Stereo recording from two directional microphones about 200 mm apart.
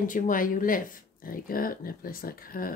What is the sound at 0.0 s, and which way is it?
Speech, 40° left (ahead or behind).